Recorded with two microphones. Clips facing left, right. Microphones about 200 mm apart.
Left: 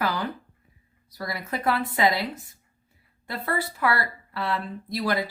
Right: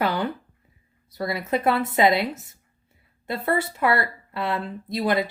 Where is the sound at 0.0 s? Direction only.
25° right (ahead or behind).